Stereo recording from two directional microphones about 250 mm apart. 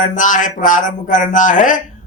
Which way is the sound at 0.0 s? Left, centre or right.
Left.